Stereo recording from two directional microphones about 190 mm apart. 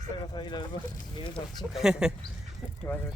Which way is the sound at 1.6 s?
Centre (ahead or behind).